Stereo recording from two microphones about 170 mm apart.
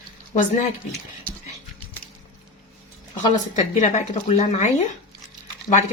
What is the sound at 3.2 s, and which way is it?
Speech, 45° left (ahead or behind).